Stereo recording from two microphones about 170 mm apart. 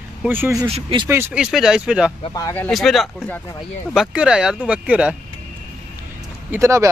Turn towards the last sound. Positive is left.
turn(degrees=-15)  # may be behind; listen again after turning